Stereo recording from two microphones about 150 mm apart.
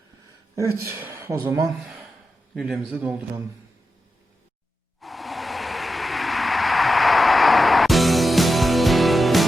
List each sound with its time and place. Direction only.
0.5 s a woman's voice: 20° right (ahead or behind)
1.6 s a man's voice: centre (ahead or behind)
4.9 s vehicle: centre (ahead or behind)